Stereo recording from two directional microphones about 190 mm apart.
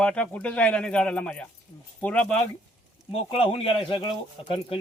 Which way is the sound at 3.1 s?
30° left (ahead or behind).